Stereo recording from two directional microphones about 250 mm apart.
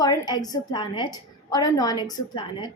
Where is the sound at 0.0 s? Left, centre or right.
Centre.